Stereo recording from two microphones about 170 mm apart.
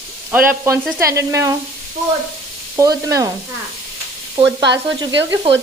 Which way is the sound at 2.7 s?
20° right (ahead or behind).